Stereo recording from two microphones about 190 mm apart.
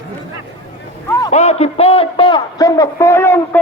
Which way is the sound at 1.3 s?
35° left (ahead or behind).